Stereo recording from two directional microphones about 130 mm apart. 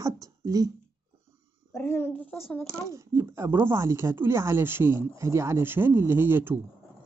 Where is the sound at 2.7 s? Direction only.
20° right (ahead or behind).